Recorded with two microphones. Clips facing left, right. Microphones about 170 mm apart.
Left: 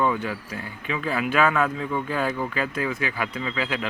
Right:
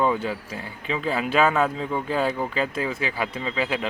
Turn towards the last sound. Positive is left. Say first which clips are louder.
# right 2 dB
turn(degrees=-25)  # may be behind; listen again after turning